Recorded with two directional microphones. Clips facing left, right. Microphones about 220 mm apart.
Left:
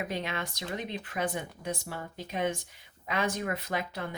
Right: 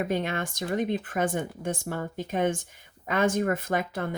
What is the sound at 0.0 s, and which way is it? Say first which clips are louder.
Speech: right 6 dB; 50° right (ahead or behind).